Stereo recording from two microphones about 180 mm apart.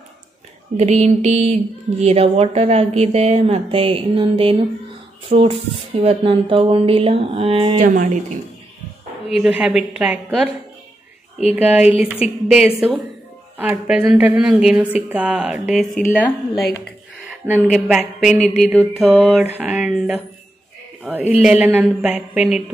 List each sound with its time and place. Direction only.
0.7 s speech: 35° right (ahead or behind)
7.9 s speech: 45° right (ahead or behind)
9.3 s a woman's voice: 5° right (ahead or behind)
11.5 s a woman's voice: 10° right (ahead or behind)
17.6 s a woman's voice: centre (ahead or behind)
21.3 s a woman's voice: 5° right (ahead or behind)